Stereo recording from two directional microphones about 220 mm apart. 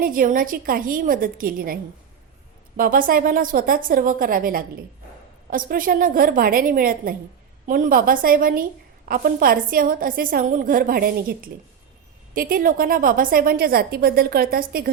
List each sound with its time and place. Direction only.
0.0 s a woman's voice: 40° right (ahead or behind)